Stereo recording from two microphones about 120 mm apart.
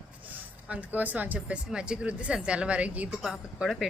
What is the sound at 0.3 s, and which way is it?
Speech, 15° right (ahead or behind).